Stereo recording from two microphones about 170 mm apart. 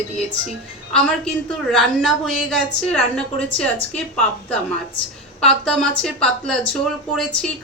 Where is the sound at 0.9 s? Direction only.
5° left (ahead or behind).